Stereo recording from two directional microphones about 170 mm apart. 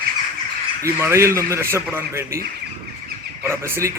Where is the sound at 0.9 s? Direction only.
15° right (ahead or behind).